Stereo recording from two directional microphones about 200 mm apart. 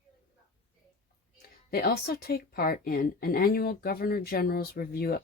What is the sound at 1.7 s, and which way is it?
Speech, 50° left (ahead or behind).